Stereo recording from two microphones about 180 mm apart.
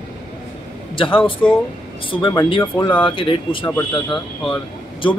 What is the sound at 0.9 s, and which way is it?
Speech, 30° left (ahead or behind).